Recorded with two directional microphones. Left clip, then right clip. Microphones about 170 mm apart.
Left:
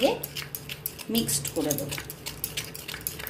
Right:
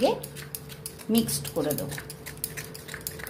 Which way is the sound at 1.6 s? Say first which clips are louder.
Right 1 dB; 60° right (ahead or behind).